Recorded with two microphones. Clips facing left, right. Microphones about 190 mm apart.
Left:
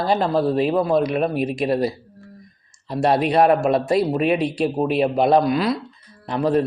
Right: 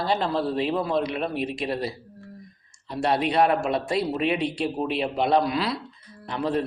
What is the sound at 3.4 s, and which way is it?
Speech, 50° left (ahead or behind).